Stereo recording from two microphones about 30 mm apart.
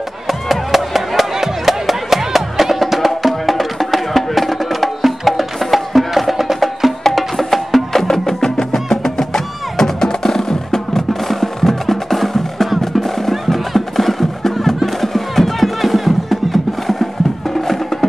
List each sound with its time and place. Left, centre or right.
0.3 s music: centre
7.0 s music: centre